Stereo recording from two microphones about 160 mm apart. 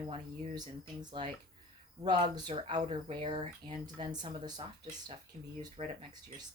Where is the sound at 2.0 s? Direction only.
25° right (ahead or behind).